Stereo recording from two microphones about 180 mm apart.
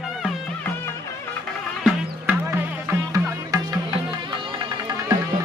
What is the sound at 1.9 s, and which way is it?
Music, 10° right (ahead or behind).